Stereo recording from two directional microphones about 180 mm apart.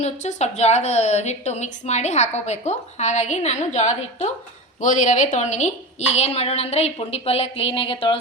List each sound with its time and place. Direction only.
0.0 s a woman's voice: 40° left (ahead or behind)